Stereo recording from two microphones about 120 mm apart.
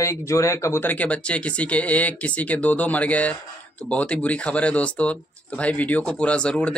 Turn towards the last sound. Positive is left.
turn(degrees=10)  # may be behind; listen again after turning